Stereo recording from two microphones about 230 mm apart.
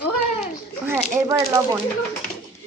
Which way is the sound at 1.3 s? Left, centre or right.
Centre.